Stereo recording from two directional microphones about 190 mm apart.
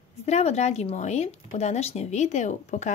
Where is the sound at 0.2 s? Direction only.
35° left (ahead or behind).